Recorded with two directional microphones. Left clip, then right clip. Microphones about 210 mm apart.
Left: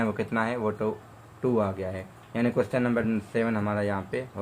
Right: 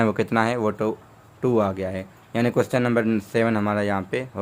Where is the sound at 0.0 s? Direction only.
50° right (ahead or behind).